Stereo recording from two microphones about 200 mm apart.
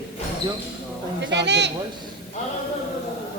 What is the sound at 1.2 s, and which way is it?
Speech, 60° right (ahead or behind).